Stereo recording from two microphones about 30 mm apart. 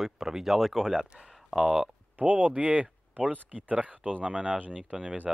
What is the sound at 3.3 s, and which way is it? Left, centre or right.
Speech, right.